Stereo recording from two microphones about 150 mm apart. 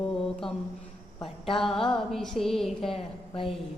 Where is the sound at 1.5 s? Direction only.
Centre (ahead or behind).